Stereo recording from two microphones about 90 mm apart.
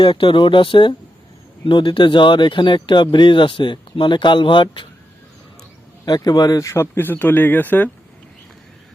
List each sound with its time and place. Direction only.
0.0 s speech: 70° left (ahead or behind)
6.1 s speech: 50° left (ahead or behind)
6.7 s speech: 25° left (ahead or behind)